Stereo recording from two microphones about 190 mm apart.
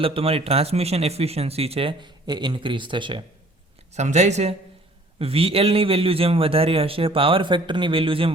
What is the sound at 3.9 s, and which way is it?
Speech, 35° right (ahead or behind).